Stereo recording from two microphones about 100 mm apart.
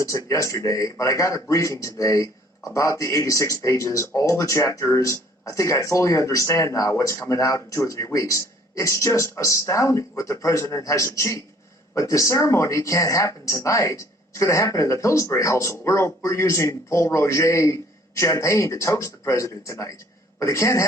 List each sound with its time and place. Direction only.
0.0 s speech: 35° left (ahead or behind)